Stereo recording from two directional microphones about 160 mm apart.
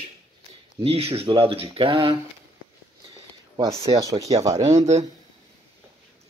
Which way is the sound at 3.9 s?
20° right (ahead or behind).